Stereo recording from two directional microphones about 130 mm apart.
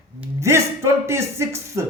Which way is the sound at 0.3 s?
20° right (ahead or behind).